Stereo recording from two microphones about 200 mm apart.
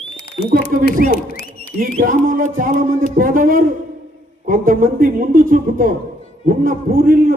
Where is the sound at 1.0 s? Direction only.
45° right (ahead or behind).